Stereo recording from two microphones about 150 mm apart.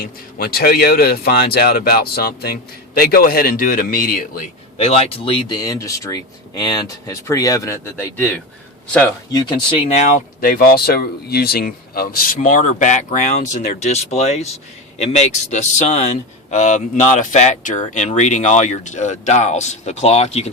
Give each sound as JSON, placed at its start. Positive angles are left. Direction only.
{"t": 0.0, "sound": "speech", "side_deg": 85}
{"t": 4.8, "sound": "speech", "side_deg": 40}
{"t": 9.3, "sound": "speech", "side_deg": 35}
{"t": 10.4, "sound": "speech", "side_deg": 85}